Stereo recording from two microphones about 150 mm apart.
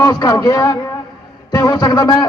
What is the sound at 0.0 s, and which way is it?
A man's voice, 25° left (ahead or behind).